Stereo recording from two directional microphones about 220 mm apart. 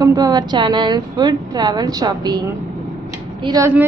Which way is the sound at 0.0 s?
15° right (ahead or behind).